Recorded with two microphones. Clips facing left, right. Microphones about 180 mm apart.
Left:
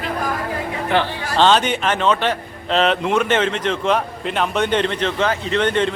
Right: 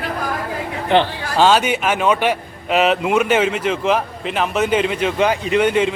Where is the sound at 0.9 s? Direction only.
20° right (ahead or behind).